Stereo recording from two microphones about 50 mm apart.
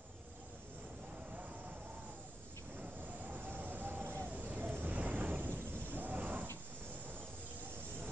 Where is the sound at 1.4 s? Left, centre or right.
Right.